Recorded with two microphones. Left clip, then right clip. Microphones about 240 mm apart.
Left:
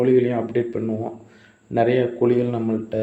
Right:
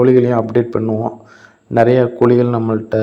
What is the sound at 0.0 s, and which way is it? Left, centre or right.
A man's voice, right.